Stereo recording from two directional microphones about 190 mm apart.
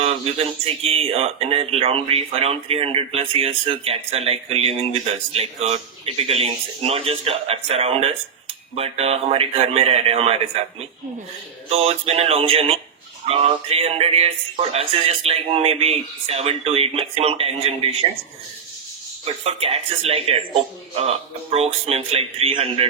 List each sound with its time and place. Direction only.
0.0 s speech: 30° right (ahead or behind)
19.2 s speech: 35° right (ahead or behind)